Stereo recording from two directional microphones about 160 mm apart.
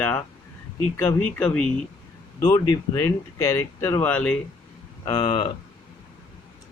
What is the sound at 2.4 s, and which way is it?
Speech, 20° left (ahead or behind).